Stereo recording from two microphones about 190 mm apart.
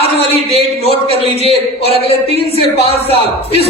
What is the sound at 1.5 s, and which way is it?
Speech, 30° left (ahead or behind).